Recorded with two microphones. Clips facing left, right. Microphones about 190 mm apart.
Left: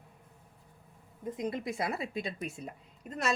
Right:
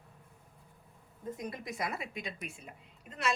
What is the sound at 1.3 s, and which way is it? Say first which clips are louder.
A woman's voice: left 7 dB; 25° left (ahead or behind).